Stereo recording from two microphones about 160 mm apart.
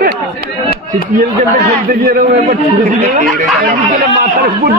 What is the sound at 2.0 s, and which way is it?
Speech, 70° right (ahead or behind).